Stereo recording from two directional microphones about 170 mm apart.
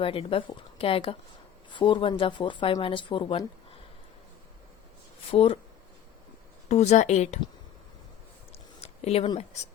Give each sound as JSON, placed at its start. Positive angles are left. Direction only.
{"t": 0.0, "sound": "speech", "side_deg": 35}
{"t": 5.3, "sound": "speech", "side_deg": 35}
{"t": 6.7, "sound": "speech", "side_deg": 40}
{"t": 8.5, "sound": "a sound", "side_deg": 40}